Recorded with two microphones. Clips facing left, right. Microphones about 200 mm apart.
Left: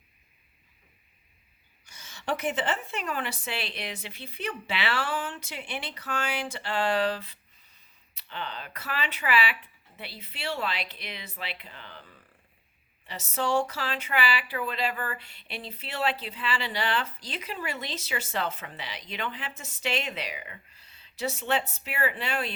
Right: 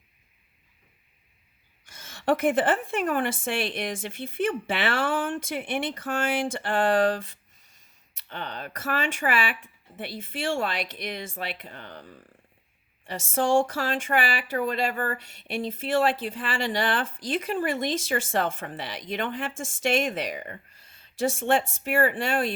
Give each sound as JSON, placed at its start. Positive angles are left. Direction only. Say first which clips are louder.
{"t": 1.8, "sound": "speech", "louder": "right 7 dB", "side_deg": -55}